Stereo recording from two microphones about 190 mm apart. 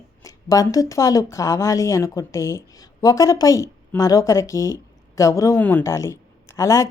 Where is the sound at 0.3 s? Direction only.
20° left (ahead or behind).